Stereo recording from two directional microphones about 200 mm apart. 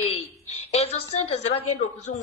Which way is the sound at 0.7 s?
30° left (ahead or behind).